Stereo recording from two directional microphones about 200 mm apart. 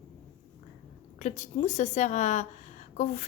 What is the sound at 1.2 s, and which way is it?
A woman's voice, 35° left (ahead or behind).